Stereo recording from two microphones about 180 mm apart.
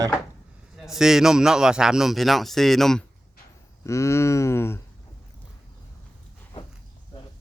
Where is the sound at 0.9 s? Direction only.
5° right (ahead or behind).